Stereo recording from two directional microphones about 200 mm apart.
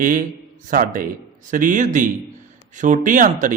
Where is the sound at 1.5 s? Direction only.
40° right (ahead or behind).